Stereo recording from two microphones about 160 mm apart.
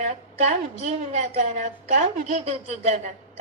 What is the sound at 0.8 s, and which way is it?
A woman's voice, 40° right (ahead or behind).